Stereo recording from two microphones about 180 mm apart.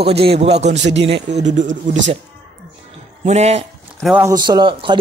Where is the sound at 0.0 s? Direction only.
35° right (ahead or behind).